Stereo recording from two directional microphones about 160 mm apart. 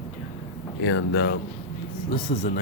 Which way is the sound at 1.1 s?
90° left.